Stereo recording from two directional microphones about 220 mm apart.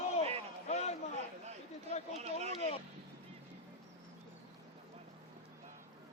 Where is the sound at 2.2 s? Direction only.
30° right (ahead or behind).